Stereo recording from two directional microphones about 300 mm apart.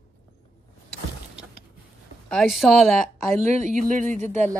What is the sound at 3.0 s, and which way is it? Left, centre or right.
Speech, right.